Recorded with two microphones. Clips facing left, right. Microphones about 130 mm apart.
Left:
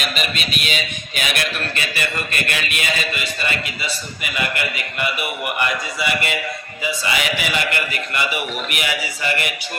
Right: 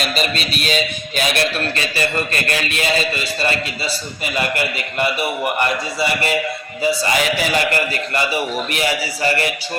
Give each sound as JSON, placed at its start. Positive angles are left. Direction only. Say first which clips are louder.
{"t": 0.1, "sound": "a man's voice", "louder": "right 4 dB", "side_deg": -35}